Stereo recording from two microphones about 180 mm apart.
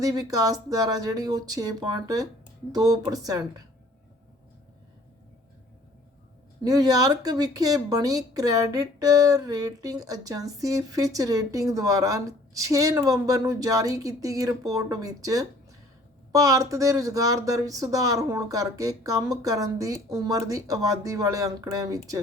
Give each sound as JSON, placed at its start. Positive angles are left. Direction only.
{"t": 0.0, "sound": "speech", "side_deg": -20}
{"t": 6.6, "sound": "speech", "side_deg": -20}